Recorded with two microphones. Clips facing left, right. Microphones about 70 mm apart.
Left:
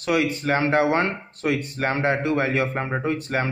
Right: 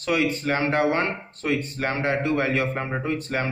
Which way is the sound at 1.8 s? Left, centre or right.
Left.